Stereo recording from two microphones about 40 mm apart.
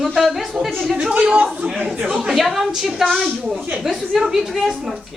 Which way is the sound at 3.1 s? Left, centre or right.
Centre.